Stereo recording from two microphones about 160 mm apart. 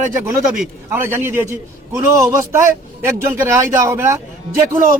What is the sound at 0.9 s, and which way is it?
A man's voice, 15° right (ahead or behind).